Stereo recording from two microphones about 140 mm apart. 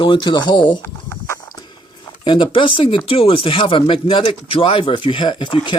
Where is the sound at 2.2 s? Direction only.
35° left (ahead or behind).